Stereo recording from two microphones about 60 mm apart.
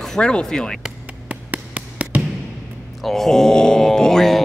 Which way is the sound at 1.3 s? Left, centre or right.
Right.